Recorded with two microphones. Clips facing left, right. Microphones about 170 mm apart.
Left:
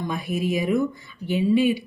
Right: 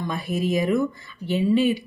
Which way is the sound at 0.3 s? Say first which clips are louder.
Right 1 dB; 15° left (ahead or behind).